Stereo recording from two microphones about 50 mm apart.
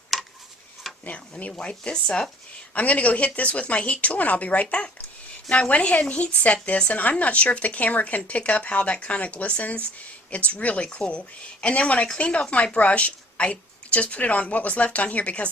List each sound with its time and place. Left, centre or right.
0.1 s a sound: centre
1.0 s speech: left
2.7 s speech: left